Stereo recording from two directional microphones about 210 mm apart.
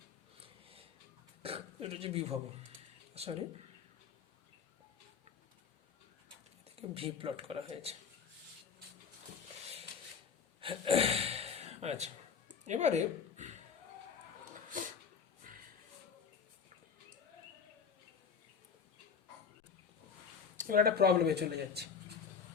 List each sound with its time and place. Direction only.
0.3 s a sound: 25° right (ahead or behind)
1.4 s throat clearing: 25° right (ahead or behind)
3.2 s speech: 30° right (ahead or behind)
6.7 s speech: 25° right (ahead or behind)
10.6 s gasp: 25° right (ahead or behind)
12.6 s speech: 35° right (ahead or behind)
14.7 s a sound: 40° right (ahead or behind)
20.6 s speech: 45° right (ahead or behind)